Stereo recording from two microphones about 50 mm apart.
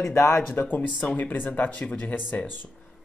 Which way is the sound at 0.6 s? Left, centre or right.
Left.